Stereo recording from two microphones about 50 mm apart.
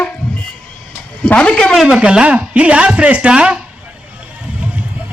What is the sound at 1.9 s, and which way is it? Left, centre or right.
Speech, right.